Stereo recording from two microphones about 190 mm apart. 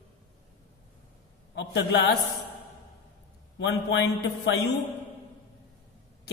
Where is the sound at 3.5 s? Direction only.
65° left (ahead or behind).